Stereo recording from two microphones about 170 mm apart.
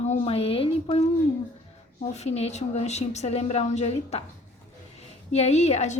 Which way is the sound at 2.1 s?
40° left (ahead or behind).